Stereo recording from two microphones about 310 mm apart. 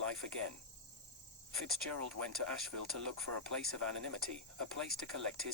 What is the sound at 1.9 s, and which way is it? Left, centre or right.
Speech, right.